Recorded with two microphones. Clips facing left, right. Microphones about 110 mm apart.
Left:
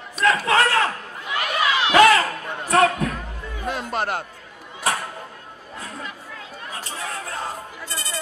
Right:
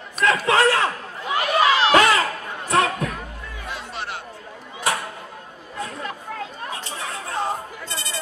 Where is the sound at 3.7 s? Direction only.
50° left (ahead or behind).